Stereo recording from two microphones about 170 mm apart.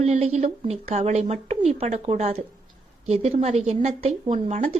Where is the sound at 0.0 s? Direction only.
40° right (ahead or behind).